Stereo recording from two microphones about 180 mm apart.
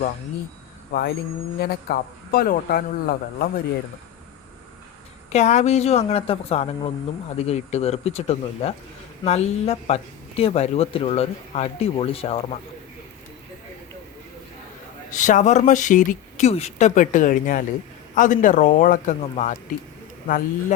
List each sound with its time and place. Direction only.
1.5 s speech: 60° left (ahead or behind)
5.3 s speech: 40° left (ahead or behind)
15.1 s speech: 45° left (ahead or behind)